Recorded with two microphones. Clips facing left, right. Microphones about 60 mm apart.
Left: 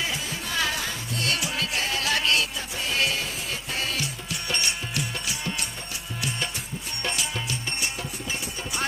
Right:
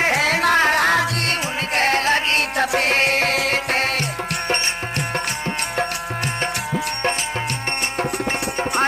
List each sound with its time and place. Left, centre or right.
0.0 s music: right
0.6 s music: right
1.8 s music: right
2.5 s music: right
8.0 s music: right